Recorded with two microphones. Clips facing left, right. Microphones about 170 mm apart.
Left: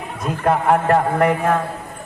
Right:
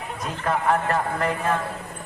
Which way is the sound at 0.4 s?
60° left (ahead or behind).